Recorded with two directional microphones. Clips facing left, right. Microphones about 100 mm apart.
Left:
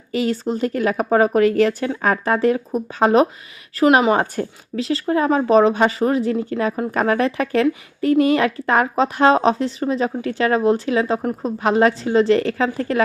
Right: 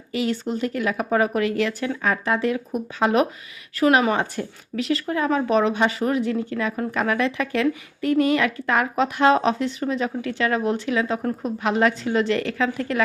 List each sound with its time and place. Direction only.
0.1 s speech: 40° left (ahead or behind)